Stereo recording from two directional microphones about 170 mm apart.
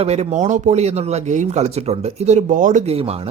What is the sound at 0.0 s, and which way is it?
Speech, 40° right (ahead or behind).